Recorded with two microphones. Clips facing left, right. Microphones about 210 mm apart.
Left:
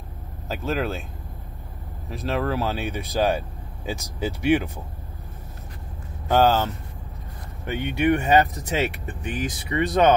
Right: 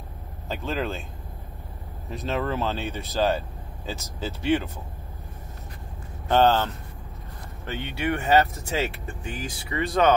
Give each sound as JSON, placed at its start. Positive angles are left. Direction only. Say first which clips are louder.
{"t": 0.5, "sound": "speech", "louder": "left 3 dB", "side_deg": 0}
{"t": 2.0, "sound": "speech", "louder": "left 2 dB", "side_deg": 0}
{"t": 6.2, "sound": "speech", "louder": "left 1 dB", "side_deg": 10}